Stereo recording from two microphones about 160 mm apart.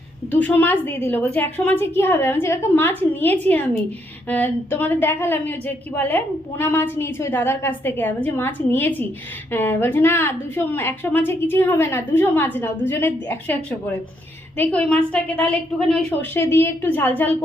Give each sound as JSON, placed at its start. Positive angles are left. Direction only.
{"t": 0.3, "sound": "a woman's voice", "side_deg": 10}